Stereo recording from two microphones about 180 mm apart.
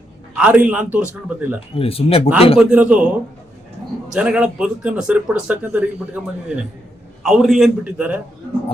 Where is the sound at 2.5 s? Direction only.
5° right (ahead or behind).